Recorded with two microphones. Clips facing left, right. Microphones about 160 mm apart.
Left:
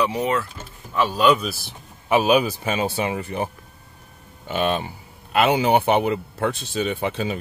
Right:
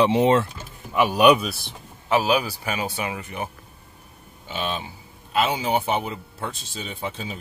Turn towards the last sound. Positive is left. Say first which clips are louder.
# left 7 dB
turn(degrees=75)  # may be behind; listen again after turning